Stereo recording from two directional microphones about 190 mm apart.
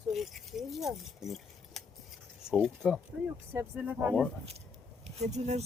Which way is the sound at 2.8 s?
10° left (ahead or behind).